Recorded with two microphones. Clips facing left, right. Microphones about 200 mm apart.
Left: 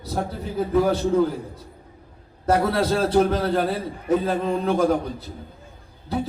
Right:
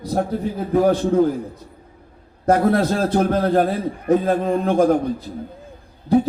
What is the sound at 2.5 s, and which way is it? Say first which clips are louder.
A man's voice: right 4 dB; 45° right (ahead or behind).